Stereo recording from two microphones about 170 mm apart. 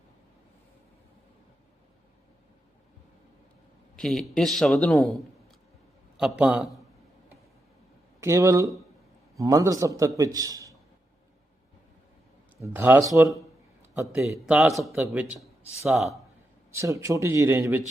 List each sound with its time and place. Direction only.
3.9 s a man's voice: centre (ahead or behind)
8.2 s a man's voice: 15° right (ahead or behind)
12.5 s speech: 15° right (ahead or behind)
14.3 s a man's voice: 5° right (ahead or behind)
16.7 s speech: 20° right (ahead or behind)